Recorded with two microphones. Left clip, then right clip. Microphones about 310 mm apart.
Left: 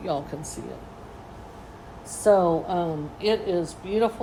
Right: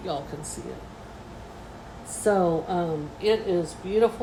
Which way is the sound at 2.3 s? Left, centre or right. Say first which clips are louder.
Left 4 dB; centre.